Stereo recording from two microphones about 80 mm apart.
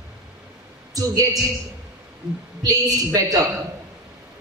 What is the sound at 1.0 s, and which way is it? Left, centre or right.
Speech, right.